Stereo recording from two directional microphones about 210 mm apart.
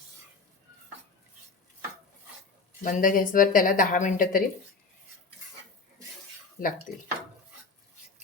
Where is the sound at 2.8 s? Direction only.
40° left (ahead or behind).